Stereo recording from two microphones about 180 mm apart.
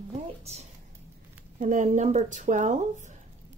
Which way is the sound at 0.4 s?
35° right (ahead or behind).